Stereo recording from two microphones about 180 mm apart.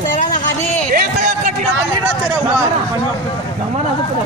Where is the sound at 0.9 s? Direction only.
45° right (ahead or behind).